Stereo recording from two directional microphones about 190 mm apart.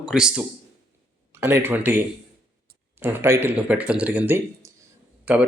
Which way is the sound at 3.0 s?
15° right (ahead or behind).